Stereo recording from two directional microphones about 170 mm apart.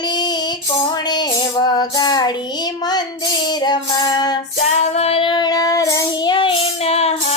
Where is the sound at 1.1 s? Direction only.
25° left (ahead or behind).